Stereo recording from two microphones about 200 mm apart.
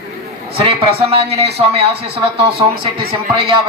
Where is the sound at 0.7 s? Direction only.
30° right (ahead or behind).